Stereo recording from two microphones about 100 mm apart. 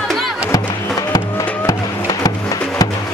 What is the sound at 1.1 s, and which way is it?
Music, 40° left (ahead or behind).